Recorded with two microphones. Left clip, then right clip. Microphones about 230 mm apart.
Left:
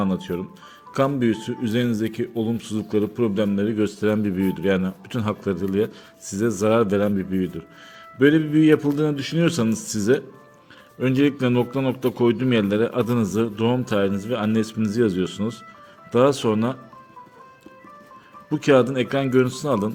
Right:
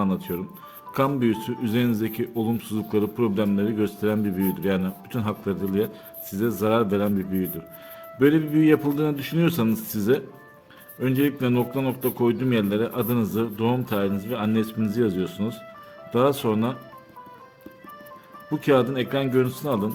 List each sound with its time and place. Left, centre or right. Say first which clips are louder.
0.0 s speech: left 2 dB; centre
18.5 s speech: left 3 dB; centre